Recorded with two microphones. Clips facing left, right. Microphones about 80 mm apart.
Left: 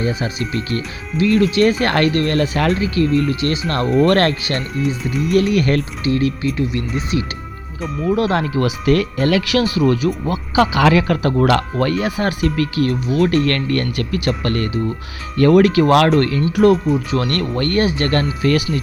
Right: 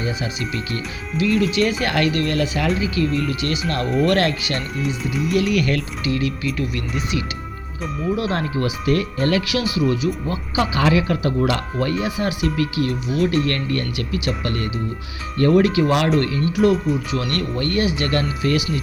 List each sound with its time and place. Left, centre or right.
0.0 s speech: left
5.0 s speech: centre
5.3 s speech: left
8.6 s speech: left
9.7 s speech: left
10.2 s speech: left
15.4 s speech: left
16.0 s speech: left
16.7 s speech: centre
17.3 s speech: left